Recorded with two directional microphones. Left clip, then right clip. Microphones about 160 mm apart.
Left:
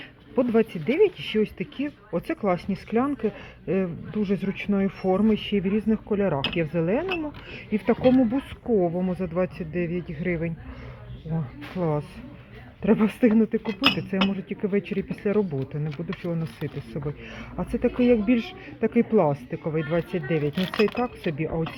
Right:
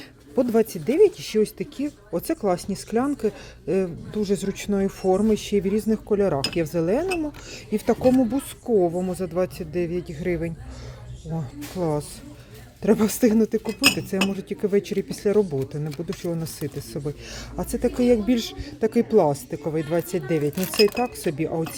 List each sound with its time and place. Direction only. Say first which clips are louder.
0.3 s speech: right 1 dB; 30° right (ahead or behind)
12.8 s speech: right 2 dB; 30° right (ahead or behind)